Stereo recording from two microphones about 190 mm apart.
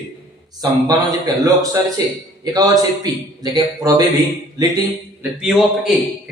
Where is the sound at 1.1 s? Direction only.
20° right (ahead or behind).